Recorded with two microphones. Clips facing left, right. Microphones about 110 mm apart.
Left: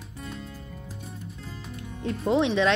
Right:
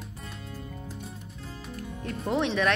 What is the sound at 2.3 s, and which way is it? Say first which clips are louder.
Speech: left 4 dB; 20° left (ahead or behind).